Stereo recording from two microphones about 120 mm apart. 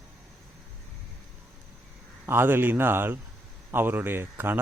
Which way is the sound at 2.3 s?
20° right (ahead or behind).